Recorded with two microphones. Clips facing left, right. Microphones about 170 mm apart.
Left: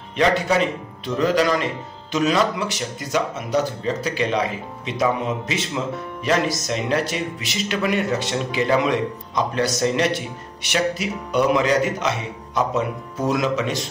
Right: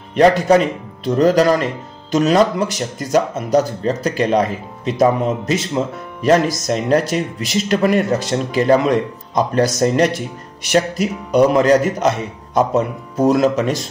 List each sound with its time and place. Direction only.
0.1 s speech: 45° right (ahead or behind)